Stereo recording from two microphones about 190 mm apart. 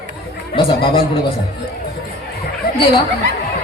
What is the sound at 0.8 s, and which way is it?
Speech, 25° left (ahead or behind).